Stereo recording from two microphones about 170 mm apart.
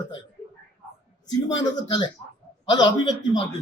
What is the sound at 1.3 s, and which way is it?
A woman's voice, 25° left (ahead or behind).